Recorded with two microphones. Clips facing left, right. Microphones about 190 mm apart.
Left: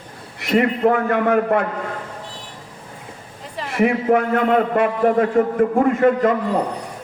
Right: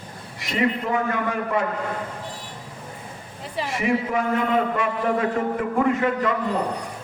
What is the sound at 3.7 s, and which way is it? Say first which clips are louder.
A man's voice: left 7 dB; 60° left (ahead or behind).